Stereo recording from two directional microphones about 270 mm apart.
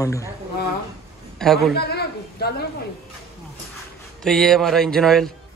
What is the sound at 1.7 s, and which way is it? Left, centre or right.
Speech, left.